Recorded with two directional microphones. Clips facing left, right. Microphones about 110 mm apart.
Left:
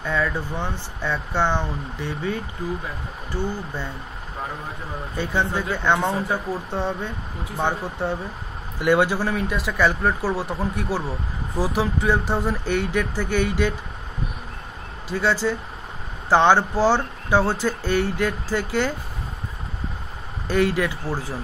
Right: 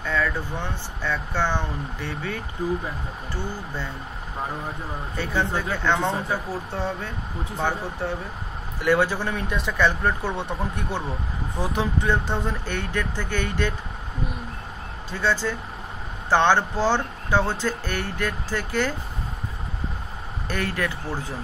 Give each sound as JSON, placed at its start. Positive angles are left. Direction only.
{"t": 0.0, "sound": "speech", "side_deg": 15}
{"t": 5.1, "sound": "speech", "side_deg": 15}
{"t": 8.8, "sound": "speech", "side_deg": 15}
{"t": 9.3, "sound": "speech", "side_deg": 0}
{"t": 15.1, "sound": "speech", "side_deg": 15}
{"t": 20.4, "sound": "speech", "side_deg": 15}